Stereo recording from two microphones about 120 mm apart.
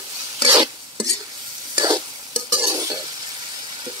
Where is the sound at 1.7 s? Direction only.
40° right (ahead or behind).